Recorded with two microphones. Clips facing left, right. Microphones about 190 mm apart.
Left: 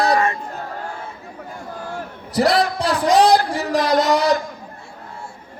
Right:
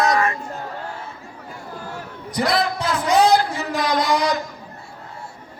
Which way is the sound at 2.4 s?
35° left (ahead or behind).